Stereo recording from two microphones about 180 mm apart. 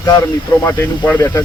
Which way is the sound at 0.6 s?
10° left (ahead or behind).